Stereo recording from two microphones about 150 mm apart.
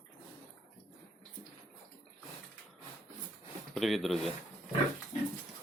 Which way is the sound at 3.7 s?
Centre (ahead or behind).